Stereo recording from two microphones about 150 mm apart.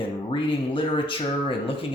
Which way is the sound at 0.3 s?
35° left (ahead or behind).